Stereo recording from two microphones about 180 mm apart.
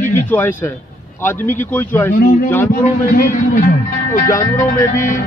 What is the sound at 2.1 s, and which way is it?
Speech, 50° left (ahead or behind).